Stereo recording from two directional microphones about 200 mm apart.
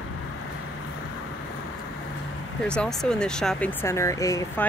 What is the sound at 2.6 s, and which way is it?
Speech, 5° left (ahead or behind).